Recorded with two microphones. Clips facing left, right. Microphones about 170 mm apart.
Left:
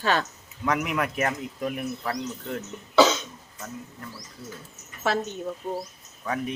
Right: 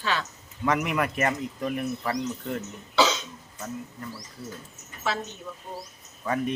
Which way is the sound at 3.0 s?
50° left (ahead or behind).